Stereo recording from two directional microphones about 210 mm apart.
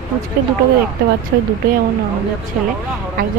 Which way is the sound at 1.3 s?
50° right (ahead or behind).